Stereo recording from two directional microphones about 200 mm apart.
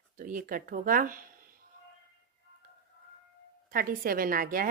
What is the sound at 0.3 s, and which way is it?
Speech, 40° right (ahead or behind).